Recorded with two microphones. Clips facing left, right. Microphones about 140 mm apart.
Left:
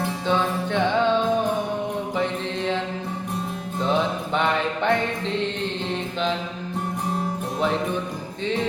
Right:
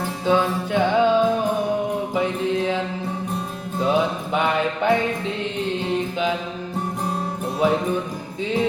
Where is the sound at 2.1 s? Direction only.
10° right (ahead or behind).